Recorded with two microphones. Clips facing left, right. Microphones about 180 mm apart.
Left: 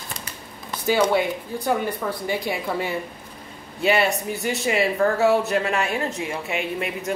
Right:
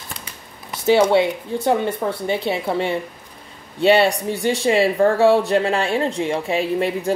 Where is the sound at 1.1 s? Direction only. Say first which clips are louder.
Right 5 dB; 25° right (ahead or behind).